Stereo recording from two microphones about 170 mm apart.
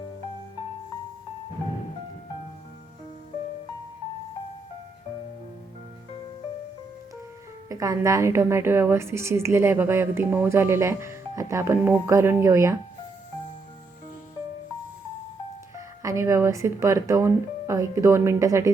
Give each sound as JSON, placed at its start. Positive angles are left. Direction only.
{"t": 7.7, "sound": "a woman's voice", "side_deg": -20}
{"t": 15.7, "sound": "speech", "side_deg": -15}